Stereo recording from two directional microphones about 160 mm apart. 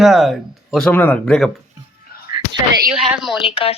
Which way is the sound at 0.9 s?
10° left (ahead or behind).